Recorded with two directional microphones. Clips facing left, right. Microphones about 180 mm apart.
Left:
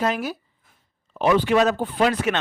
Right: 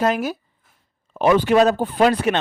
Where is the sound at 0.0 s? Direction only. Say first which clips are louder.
Right 4 dB; 45° right (ahead or behind).